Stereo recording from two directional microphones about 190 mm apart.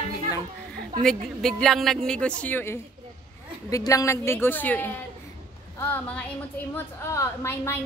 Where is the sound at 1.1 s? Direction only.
Centre (ahead or behind).